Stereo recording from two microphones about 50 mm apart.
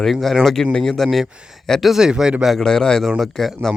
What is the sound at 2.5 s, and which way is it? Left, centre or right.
Speech, centre.